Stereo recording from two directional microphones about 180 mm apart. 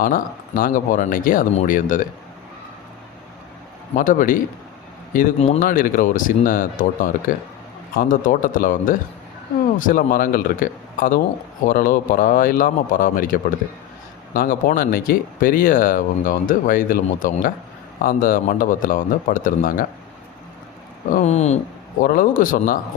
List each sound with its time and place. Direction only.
0.0 s speech: 50° left (ahead or behind)
3.9 s speech: 45° left (ahead or behind)
21.1 s speech: 45° left (ahead or behind)
22.0 s speech: 50° left (ahead or behind)